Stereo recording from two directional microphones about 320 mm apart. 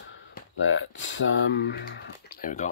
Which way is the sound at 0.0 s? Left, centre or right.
Left.